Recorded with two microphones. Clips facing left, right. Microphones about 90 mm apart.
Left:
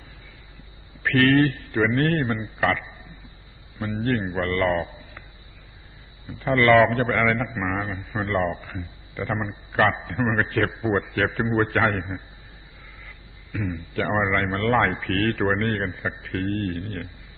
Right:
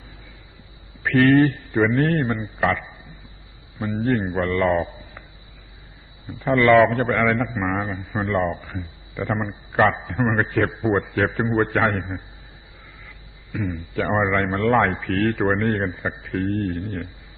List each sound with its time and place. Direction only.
1.0 s a man's voice: 5° right (ahead or behind)
6.4 s a man's voice: centre (ahead or behind)
13.5 s a man's voice: 5° right (ahead or behind)